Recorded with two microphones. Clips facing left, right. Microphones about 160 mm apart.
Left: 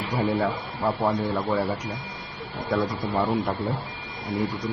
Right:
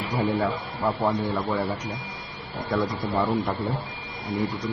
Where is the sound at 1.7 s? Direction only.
10° right (ahead or behind).